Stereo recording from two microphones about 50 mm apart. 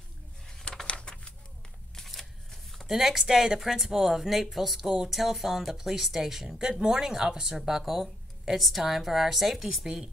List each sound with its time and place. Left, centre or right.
0.5 s a sound: centre
2.0 s shuffling cards: centre
2.9 s speech: centre